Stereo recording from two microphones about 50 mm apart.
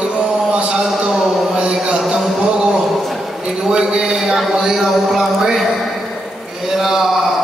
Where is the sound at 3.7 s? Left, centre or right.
Centre.